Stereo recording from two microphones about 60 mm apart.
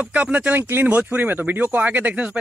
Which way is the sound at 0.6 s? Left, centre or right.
Right.